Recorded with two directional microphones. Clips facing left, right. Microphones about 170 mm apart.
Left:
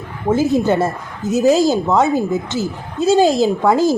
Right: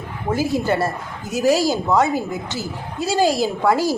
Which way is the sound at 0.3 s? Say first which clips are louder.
Left 5 dB; 20° left (ahead or behind).